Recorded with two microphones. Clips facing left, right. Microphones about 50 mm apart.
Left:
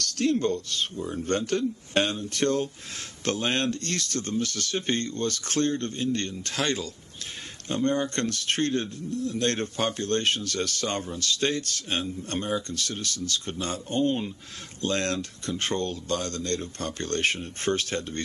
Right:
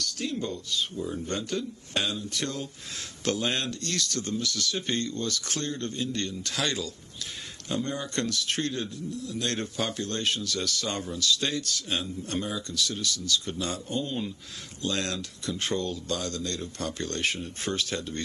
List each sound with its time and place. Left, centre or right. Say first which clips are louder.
0.0 s speech: left 7 dB; left
0.9 s speech: left 1 dB; left
1.2 s speech: left 5 dB; left